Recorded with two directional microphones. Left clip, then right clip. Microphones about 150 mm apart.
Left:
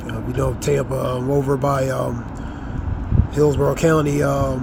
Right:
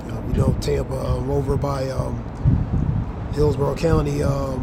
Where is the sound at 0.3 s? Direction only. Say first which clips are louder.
Left 3 dB; 25° left (ahead or behind).